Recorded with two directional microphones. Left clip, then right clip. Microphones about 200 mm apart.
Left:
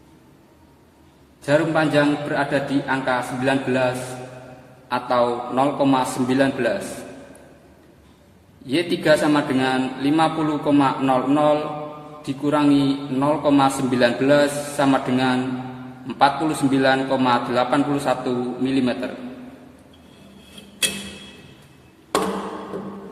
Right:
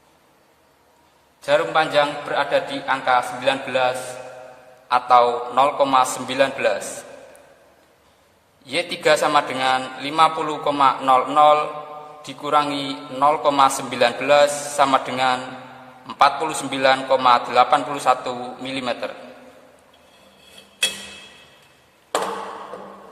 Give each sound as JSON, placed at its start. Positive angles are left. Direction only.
{"t": 1.4, "sound": "a man's voice", "side_deg": -35}
{"t": 8.6, "sound": "a man's voice", "side_deg": -40}